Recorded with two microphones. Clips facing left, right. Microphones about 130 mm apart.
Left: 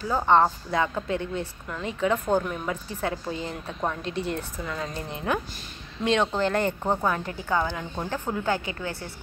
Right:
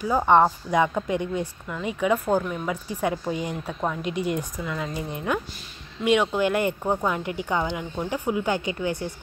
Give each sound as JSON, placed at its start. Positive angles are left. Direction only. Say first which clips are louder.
{"t": 0.0, "sound": "a woman's voice", "louder": "right 2 dB", "side_deg": -10}
{"t": 2.7, "sound": "a woman's voice", "louder": "right 5 dB", "side_deg": -15}
{"t": 5.1, "sound": "a woman's voice", "louder": "even", "side_deg": 20}
{"t": 6.0, "sound": "a woman's voice", "louder": "right 2 dB", "side_deg": 0}
{"t": 6.8, "sound": "speech", "louder": "right 1 dB", "side_deg": 10}
{"t": 7.1, "sound": "a woman's voice", "louder": "right 1 dB", "side_deg": -15}